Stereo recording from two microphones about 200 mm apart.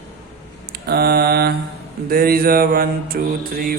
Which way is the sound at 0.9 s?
50° right (ahead or behind).